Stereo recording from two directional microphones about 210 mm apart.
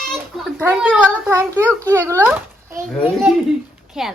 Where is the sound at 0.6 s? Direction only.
10° right (ahead or behind).